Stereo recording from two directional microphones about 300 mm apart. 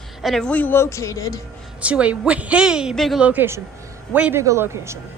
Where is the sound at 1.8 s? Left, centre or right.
Centre.